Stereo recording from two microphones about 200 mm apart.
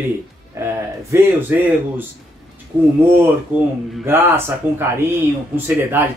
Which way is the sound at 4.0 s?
10° right (ahead or behind).